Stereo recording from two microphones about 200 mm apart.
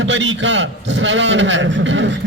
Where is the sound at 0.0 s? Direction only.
70° right (ahead or behind).